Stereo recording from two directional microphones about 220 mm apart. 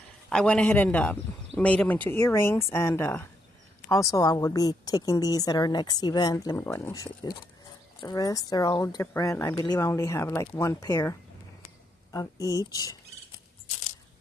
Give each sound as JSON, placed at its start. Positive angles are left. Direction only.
{"t": 0.3, "sound": "a woman's voice", "side_deg": 5}